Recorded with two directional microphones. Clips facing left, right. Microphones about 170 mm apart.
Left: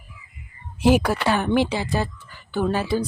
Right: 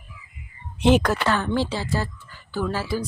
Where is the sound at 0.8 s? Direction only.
5° left (ahead or behind).